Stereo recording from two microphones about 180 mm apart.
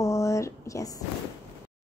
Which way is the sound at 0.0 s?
15° left (ahead or behind).